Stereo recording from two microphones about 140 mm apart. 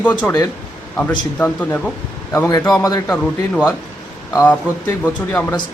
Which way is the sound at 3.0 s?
5° left (ahead or behind).